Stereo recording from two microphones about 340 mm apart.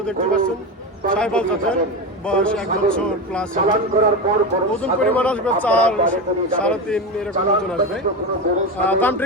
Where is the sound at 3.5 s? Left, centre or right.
Centre.